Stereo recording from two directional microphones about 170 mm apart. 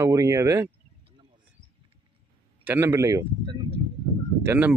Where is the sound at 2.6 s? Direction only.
15° right (ahead or behind).